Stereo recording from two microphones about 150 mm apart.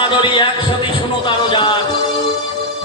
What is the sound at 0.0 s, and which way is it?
Heart sounds, 35° left (ahead or behind).